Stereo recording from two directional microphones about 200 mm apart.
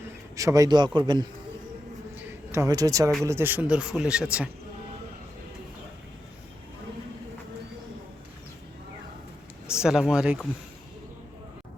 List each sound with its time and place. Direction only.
0.3 s a man's voice: 15° right (ahead or behind)
2.1 s a sound: 15° right (ahead or behind)
3.2 s speech: 10° right (ahead or behind)
9.6 s speech: 5° right (ahead or behind)